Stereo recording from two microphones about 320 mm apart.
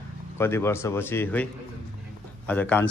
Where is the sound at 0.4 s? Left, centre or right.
Centre.